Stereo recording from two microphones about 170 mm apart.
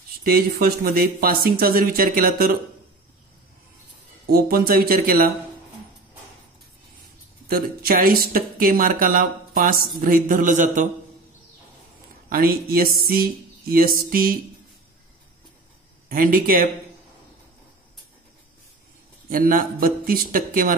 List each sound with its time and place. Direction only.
0.2 s speech: 60° right (ahead or behind)
4.3 s speech: 60° right (ahead or behind)
7.4 s speech: 60° right (ahead or behind)
12.3 s speech: 60° right (ahead or behind)
16.1 s speech: 55° right (ahead or behind)
19.2 s speech: 55° right (ahead or behind)